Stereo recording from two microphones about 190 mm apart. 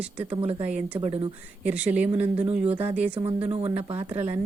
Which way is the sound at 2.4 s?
30° right (ahead or behind).